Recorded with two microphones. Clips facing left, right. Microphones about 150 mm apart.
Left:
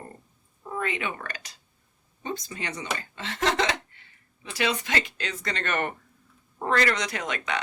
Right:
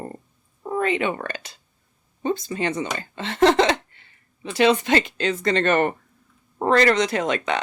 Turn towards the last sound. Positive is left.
turn(degrees=-30)  # may be behind; listen again after turning